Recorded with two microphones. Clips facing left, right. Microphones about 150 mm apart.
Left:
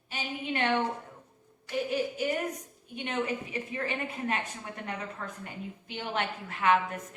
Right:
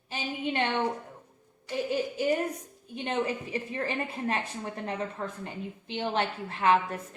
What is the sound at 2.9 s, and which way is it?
A woman's voice, 30° right (ahead or behind).